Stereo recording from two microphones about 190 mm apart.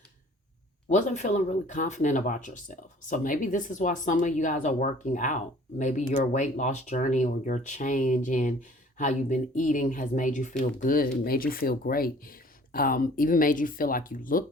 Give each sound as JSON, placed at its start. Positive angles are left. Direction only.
{"t": 0.9, "sound": "speech", "side_deg": 40}